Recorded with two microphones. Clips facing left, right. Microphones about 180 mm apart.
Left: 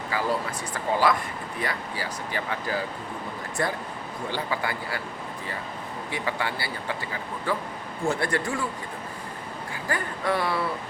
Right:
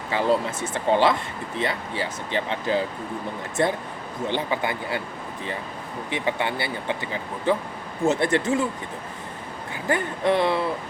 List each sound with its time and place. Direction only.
0.1 s speech: 25° right (ahead or behind)
6.1 s speech: 20° right (ahead or behind)
9.8 s speech: 25° right (ahead or behind)